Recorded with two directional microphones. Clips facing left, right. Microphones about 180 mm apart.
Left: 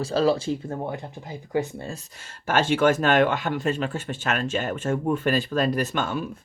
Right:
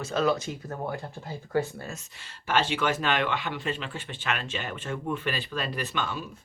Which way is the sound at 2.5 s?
45° left (ahead or behind).